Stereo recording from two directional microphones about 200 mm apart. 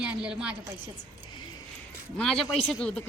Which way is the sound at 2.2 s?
Centre (ahead or behind).